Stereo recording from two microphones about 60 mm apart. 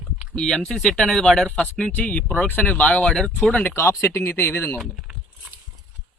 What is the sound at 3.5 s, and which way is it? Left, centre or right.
Speech, left.